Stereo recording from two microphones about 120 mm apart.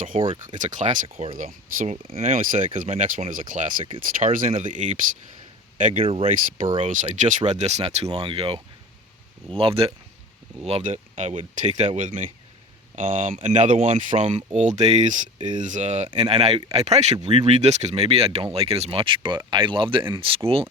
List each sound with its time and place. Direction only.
0.4 s speech: 90° right
1.0 s speech: 55° right (ahead or behind); by 2.6 s 90° right
2.7 s speech: 75° right (ahead or behind)
6.0 s speech: 55° right (ahead or behind)
6.8 s speech: 90° right; by 8.0 s 65° right (ahead or behind)
8.1 s speech: 50° right (ahead or behind)
11.2 s speech: 80° right
15.4 s speech: 90° right
16.1 s speech: 60° right (ahead or behind)